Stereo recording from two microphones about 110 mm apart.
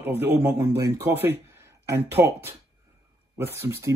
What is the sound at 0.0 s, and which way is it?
A man's voice, 20° right (ahead or behind).